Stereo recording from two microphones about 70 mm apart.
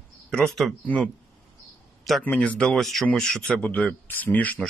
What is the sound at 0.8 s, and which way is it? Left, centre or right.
Speech, centre.